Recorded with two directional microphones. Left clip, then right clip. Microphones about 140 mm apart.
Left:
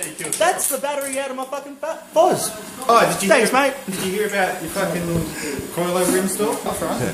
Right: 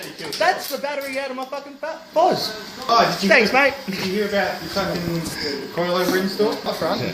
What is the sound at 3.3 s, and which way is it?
Speech, 10° left (ahead or behind).